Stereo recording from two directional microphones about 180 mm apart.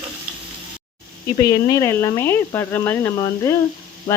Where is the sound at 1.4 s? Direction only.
15° left (ahead or behind).